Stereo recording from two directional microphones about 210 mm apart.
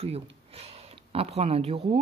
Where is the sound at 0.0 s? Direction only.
30° right (ahead or behind).